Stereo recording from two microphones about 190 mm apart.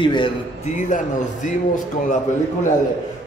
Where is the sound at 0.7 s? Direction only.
40° left (ahead or behind).